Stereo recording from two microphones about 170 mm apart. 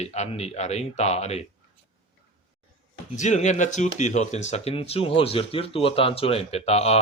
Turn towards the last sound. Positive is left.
turn(degrees=35)  # may be behind; listen again after turning